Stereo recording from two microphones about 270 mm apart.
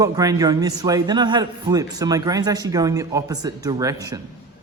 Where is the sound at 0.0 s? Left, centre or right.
Centre.